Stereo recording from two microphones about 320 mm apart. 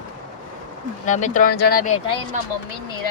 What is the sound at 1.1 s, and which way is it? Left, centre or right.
Speech, left.